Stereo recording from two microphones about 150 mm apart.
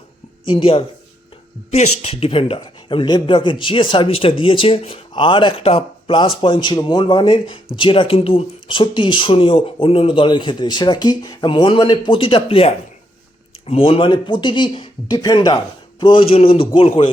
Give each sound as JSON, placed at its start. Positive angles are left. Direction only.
{"t": 0.4, "sound": "speech", "side_deg": 35}